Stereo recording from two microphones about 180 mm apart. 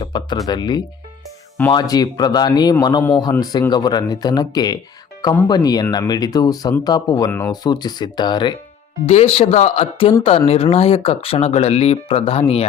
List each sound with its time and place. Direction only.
0.0 s music: 25° left (ahead or behind)
0.4 s speech: 25° left (ahead or behind)
9.0 s speech: 35° left (ahead or behind)